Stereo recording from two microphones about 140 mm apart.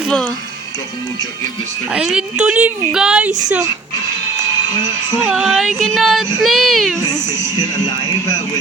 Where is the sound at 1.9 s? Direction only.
5° right (ahead or behind).